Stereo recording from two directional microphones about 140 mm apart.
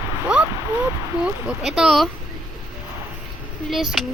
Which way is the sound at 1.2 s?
Centre (ahead or behind).